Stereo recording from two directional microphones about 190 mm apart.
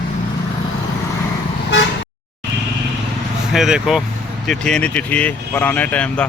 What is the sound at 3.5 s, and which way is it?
Speech, centre (ahead or behind).